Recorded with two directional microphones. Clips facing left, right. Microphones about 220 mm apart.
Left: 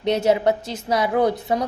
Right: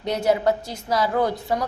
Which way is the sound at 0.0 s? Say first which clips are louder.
Left 2 dB; 25° left (ahead or behind).